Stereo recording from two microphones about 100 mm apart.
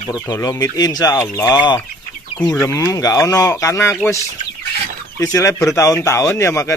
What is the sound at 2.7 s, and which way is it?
Speech, 35° left (ahead or behind).